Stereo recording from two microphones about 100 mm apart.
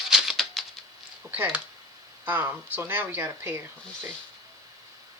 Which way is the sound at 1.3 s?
15° right (ahead or behind).